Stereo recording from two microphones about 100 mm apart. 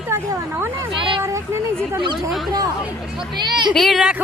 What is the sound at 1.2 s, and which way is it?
Speech, 30° right (ahead or behind).